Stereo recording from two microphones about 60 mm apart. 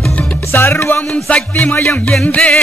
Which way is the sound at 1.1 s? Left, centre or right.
Centre.